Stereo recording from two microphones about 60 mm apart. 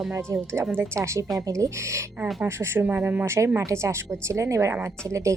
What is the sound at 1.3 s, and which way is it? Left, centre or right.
A woman's voice, right.